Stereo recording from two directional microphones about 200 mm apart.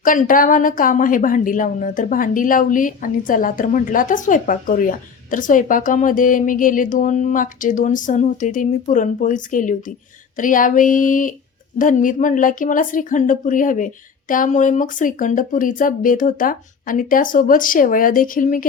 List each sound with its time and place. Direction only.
0.0 s a woman's voice: 40° left (ahead or behind)